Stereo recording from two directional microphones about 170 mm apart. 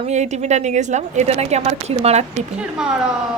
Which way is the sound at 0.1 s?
40° right (ahead or behind).